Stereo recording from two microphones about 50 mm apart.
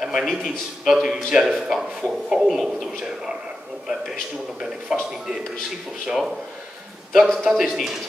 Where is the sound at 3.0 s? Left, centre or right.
Centre.